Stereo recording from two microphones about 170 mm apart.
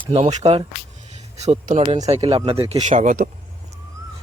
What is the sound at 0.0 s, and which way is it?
Speech, 30° right (ahead or behind).